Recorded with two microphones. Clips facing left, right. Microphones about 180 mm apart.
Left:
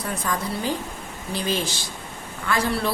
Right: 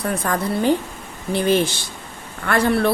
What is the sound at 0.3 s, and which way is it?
A woman's voice, 60° right (ahead or behind).